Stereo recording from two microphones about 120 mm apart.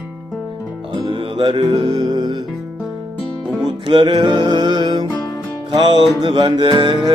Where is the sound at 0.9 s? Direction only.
40° right (ahead or behind).